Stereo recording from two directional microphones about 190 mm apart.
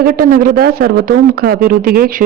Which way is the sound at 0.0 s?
50° right (ahead or behind).